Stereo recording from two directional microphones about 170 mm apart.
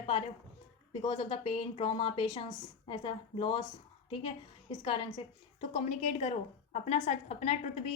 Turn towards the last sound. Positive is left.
turn(degrees=40)  # may be behind; listen again after turning